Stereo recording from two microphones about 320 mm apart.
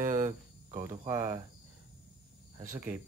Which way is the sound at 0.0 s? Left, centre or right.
Right.